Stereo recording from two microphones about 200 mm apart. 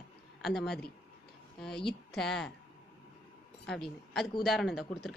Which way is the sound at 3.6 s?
Centre (ahead or behind).